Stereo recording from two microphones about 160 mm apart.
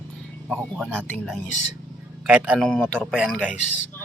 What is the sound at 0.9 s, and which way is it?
Speech, 10° left (ahead or behind).